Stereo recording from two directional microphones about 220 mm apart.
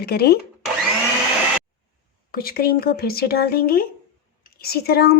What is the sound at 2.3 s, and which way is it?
Speech, 45° left (ahead or behind).